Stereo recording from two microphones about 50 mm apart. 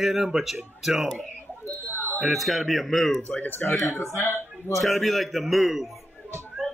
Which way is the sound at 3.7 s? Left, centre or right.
Left.